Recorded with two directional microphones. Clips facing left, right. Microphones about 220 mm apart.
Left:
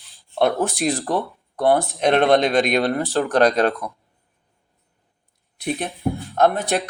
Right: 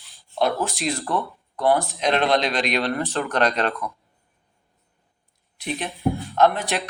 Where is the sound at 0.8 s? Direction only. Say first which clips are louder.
Left 4 dB; 35° left (ahead or behind).